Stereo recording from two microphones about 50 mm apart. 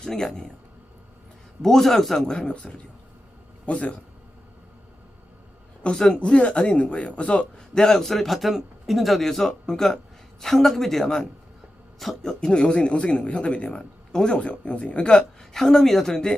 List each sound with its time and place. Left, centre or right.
0.0 s speech: centre
1.6 s speech: centre; by 3.9 s left
5.8 s speech: centre
7.8 s a man's voice: centre
15.5 s speech: centre